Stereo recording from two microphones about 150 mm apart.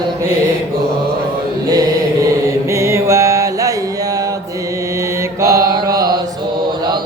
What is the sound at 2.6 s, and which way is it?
Music, 20° right (ahead or behind).